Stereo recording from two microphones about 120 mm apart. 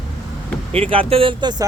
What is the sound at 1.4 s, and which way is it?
Speech, 35° right (ahead or behind).